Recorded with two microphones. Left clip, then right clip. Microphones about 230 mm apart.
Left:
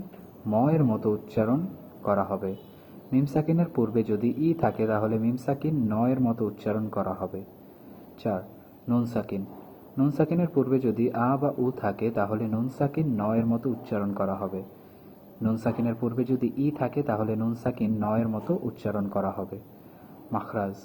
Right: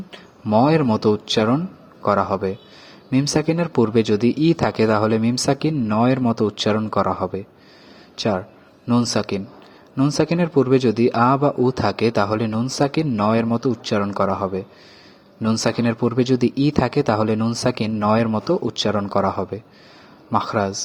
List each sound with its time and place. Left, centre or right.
0.5 s speech: right